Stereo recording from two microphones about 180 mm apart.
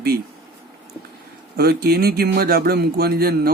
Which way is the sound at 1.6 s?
60° right (ahead or behind).